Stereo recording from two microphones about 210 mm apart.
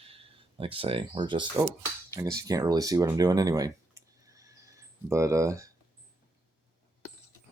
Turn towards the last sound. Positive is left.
turn(degrees=-15)  # may be behind; listen again after turning